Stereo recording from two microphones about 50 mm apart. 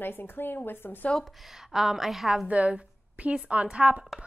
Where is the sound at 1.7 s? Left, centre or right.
Centre.